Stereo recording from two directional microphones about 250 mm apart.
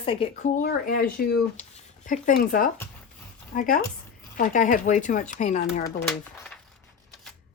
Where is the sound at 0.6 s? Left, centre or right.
Left.